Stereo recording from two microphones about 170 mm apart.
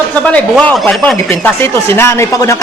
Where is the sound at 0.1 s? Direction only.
5° left (ahead or behind).